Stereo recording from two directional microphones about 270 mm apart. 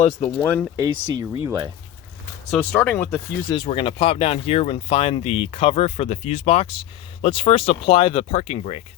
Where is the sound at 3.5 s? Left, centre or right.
Centre.